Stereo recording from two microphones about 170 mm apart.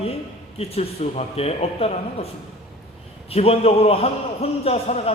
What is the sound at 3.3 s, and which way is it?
A man's voice, 35° left (ahead or behind).